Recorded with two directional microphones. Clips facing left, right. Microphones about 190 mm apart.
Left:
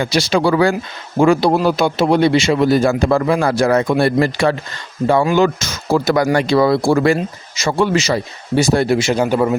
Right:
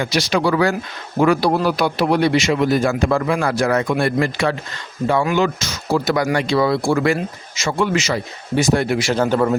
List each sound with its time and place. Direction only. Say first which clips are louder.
0.0 s a man's voice: left 3 dB; 30° left (ahead or behind)
5.5 s speech: left 3 dB; 45° left (ahead or behind)
9.0 s a man's voice: left 2 dB; 10° left (ahead or behind)